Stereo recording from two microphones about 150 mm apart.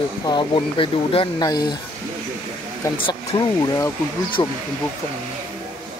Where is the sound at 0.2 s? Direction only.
30° left (ahead or behind).